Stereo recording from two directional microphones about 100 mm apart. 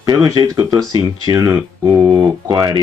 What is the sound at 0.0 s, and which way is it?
Speech, 40° right (ahead or behind).